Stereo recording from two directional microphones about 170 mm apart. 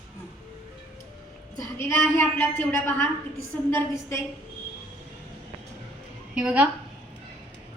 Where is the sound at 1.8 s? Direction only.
15° left (ahead or behind).